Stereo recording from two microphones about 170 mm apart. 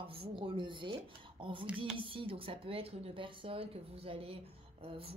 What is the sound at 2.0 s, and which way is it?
Speech, 30° right (ahead or behind).